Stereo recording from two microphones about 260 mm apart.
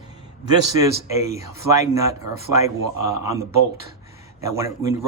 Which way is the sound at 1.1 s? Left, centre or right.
Centre.